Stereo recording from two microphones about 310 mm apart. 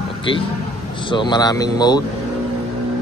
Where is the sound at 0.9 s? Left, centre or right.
Centre.